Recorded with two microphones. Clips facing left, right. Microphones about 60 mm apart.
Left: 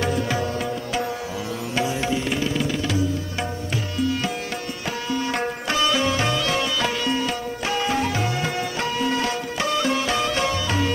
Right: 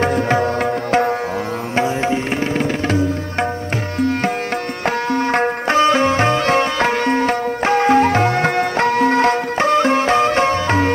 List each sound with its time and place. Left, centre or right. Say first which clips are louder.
0.0 s music: right 7 dB; right
1.8 s music: right 6 dB; right
4.8 s music: right 8 dB; right